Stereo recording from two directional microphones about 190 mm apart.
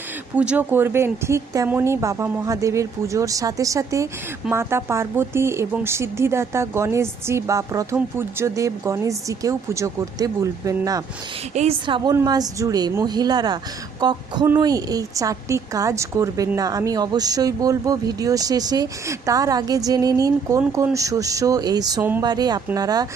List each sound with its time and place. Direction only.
0.3 s a woman's voice: 10° right (ahead or behind)
11.5 s a woman's voice: 30° right (ahead or behind)